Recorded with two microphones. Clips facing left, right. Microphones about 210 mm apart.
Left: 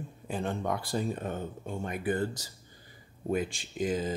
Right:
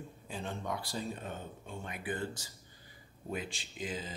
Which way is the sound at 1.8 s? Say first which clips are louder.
Left 8 dB; 40° left (ahead or behind).